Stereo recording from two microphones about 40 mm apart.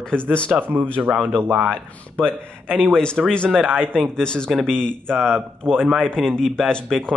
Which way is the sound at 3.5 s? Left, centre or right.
Centre.